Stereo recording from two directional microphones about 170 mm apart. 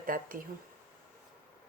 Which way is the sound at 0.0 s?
55° right (ahead or behind).